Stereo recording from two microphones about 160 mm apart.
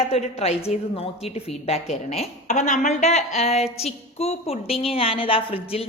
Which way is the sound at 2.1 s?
45° left (ahead or behind).